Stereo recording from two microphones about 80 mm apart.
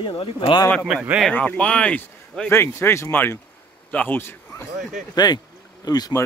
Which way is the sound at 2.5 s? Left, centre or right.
Left.